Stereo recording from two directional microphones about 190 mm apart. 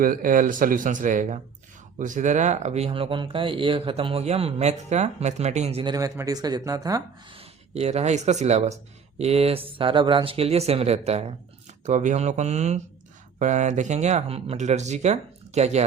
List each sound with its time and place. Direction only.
0.0 s speech: 45° right (ahead or behind); by 7.4 s 20° right (ahead or behind)
7.7 s speech: 35° right (ahead or behind)